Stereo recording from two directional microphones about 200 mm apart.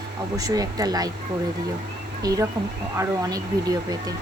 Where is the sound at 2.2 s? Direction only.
15° right (ahead or behind).